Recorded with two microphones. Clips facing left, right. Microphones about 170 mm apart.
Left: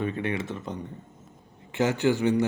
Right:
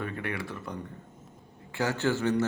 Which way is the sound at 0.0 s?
20° left (ahead or behind).